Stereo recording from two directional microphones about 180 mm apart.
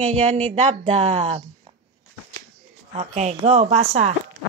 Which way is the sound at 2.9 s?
40° right (ahead or behind).